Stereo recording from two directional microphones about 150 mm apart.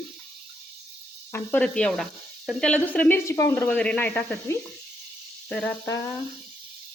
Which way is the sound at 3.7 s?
10° left (ahead or behind).